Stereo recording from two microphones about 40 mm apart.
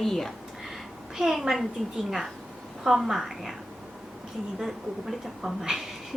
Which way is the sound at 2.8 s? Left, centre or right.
Centre.